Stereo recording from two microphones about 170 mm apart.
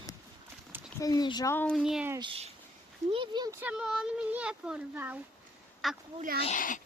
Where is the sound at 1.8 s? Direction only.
5° right (ahead or behind).